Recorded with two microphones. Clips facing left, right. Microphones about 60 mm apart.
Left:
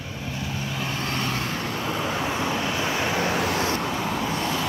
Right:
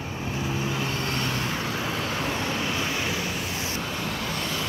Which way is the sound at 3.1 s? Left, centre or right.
Left.